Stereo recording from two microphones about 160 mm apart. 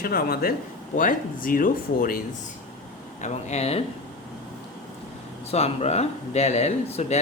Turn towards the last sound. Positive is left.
turn(degrees=45)  # may be behind; listen again after turning